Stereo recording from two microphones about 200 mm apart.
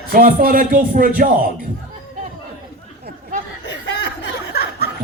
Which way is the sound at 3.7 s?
60° left (ahead or behind).